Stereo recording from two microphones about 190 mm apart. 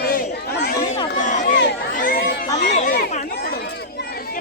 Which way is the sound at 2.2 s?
55° left (ahead or behind).